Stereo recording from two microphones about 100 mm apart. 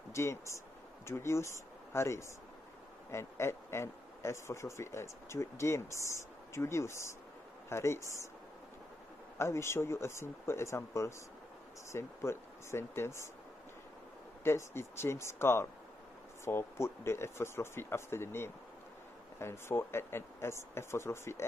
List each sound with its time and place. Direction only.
0.1 s speech: 30° left (ahead or behind)
9.4 s speech: 25° left (ahead or behind)
14.4 s speech: 25° left (ahead or behind)